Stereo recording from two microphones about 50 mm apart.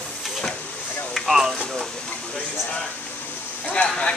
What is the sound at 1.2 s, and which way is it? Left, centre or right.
Speech, centre.